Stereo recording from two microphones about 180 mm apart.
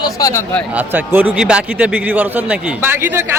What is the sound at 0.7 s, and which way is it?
A man's voice, 10° right (ahead or behind).